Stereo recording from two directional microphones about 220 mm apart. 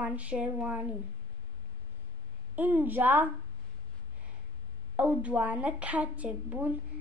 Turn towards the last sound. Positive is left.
turn(degrees=-5)  # may be behind; listen again after turning